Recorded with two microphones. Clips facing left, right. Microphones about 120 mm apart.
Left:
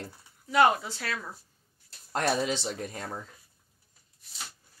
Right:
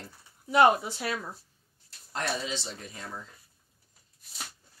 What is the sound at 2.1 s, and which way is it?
Speech, 50° left (ahead or behind).